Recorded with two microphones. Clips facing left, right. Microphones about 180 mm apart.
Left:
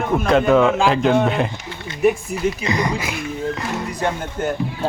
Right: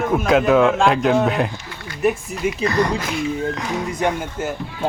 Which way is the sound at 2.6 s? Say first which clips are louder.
Right 2 dB; 10° left (ahead or behind).